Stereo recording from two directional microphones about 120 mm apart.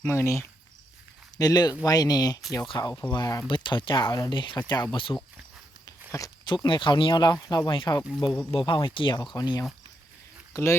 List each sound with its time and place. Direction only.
0.0 s speech: 20° left (ahead or behind); by 5.1 s 40° left (ahead or behind)
5.8 s walk: 30° left (ahead or behind)
6.4 s speech: 40° left (ahead or behind)
7.7 s speech: 45° left (ahead or behind)
10.5 s speech: 25° left (ahead or behind)